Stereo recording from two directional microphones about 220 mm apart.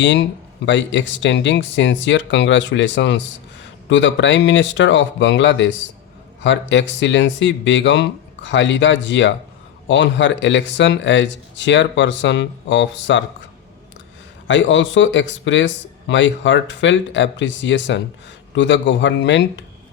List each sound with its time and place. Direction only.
0.0 s speech: 55° left (ahead or behind)
14.4 s speech: 55° left (ahead or behind)